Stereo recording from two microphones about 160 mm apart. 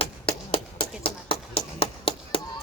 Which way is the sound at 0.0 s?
35° left (ahead or behind).